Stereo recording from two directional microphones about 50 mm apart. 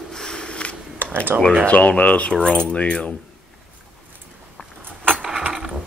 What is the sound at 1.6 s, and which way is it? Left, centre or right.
Speech, left.